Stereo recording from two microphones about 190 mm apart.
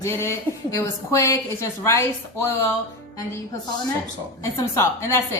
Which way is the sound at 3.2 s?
15° left (ahead or behind).